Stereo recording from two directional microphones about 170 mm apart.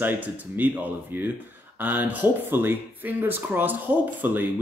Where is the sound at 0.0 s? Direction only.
10° right (ahead or behind).